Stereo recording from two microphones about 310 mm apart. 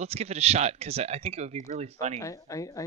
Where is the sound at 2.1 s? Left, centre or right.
Centre.